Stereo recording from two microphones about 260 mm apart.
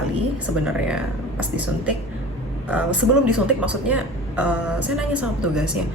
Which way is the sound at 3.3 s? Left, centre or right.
Centre.